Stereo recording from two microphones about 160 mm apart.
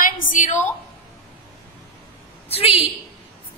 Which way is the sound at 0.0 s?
55° left (ahead or behind).